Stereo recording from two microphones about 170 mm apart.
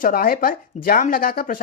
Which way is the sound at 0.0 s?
60° left (ahead or behind).